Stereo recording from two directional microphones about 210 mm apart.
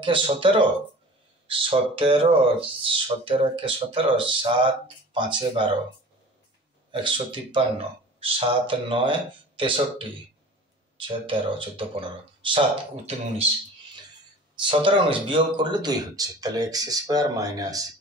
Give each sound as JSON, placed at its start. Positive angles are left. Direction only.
{"t": 0.0, "sound": "speech", "side_deg": -25}
{"t": 6.9, "sound": "speech", "side_deg": -25}
{"t": 14.5, "sound": "speech", "side_deg": -25}